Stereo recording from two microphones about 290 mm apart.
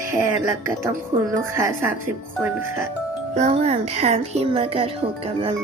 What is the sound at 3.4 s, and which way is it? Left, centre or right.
Speech, right.